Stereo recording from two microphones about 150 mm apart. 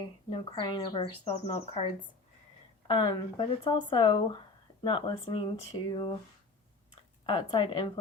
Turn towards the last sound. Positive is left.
turn(degrees=30)  # may be behind; listen again after turning